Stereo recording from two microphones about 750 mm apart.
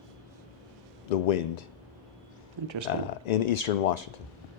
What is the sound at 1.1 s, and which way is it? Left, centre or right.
Speech, left.